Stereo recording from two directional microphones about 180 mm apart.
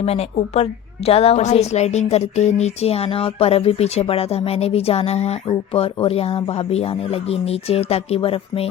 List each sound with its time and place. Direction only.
0.0 s a woman's voice: 35° left (ahead or behind)